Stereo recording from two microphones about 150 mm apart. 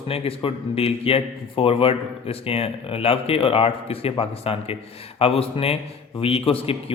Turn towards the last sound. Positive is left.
turn(degrees=40)  # may be behind; listen again after turning